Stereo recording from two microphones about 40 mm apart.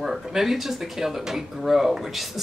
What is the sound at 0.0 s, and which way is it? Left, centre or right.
Speech, centre.